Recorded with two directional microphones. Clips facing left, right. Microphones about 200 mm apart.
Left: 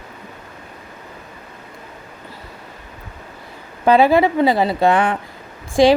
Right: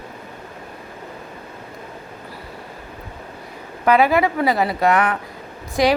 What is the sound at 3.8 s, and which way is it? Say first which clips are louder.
A woman's voice: left 3 dB; 30° left (ahead or behind).